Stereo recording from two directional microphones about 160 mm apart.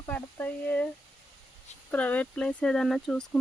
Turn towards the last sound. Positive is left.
turn(degrees=5)  # may be behind; listen again after turning